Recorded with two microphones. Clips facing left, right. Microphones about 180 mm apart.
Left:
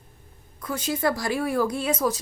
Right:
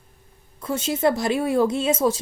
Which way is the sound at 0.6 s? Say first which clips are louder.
Right 4 dB; 25° right (ahead or behind).